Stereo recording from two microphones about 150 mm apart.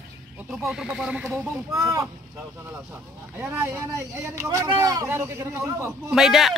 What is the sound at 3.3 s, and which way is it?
Speech, 15° right (ahead or behind).